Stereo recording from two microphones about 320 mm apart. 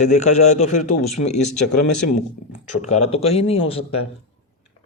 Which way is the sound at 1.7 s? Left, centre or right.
Left.